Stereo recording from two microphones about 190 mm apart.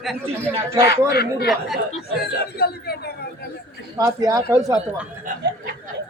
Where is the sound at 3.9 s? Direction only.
15° right (ahead or behind).